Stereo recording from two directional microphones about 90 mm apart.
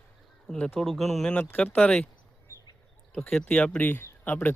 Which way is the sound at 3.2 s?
5° left (ahead or behind).